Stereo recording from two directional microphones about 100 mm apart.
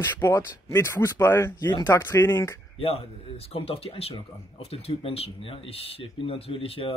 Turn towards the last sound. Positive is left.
turn(degrees=65)  # may be behind; listen again after turning